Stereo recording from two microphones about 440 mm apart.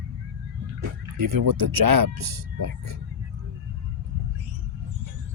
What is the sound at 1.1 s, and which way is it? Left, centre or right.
Speech, right.